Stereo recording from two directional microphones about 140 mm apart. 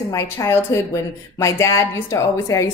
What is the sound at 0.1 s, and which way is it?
A woman's voice, 20° left (ahead or behind).